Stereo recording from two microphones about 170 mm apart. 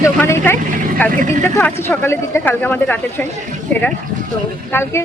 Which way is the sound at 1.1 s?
50° right (ahead or behind).